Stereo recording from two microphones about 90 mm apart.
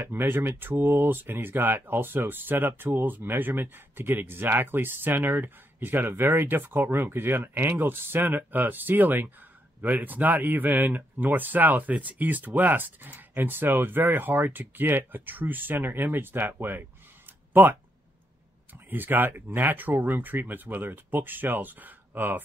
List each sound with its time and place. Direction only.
0.0 s speech: 25° right (ahead or behind)
17.5 s a sound: 20° right (ahead or behind)
18.9 s speech: 20° right (ahead or behind)